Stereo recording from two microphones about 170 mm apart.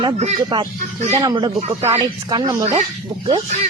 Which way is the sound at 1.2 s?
25° right (ahead or behind).